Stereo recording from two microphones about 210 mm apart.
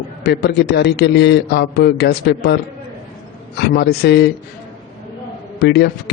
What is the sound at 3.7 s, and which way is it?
Speech, 50° left (ahead or behind).